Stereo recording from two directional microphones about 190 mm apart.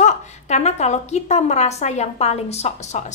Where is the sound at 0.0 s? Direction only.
35° left (ahead or behind).